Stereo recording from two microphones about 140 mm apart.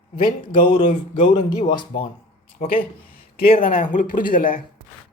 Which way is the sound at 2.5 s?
90° left.